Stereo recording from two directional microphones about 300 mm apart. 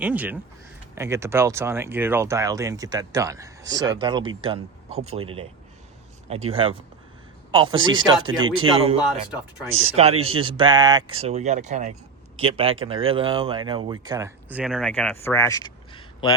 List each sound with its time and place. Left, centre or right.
0.0 s speech: centre
6.5 s speech: centre